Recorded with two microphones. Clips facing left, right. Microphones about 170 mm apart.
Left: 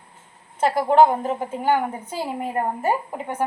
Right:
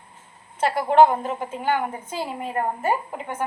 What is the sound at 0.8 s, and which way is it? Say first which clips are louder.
Speech: even; 40° left (ahead or behind).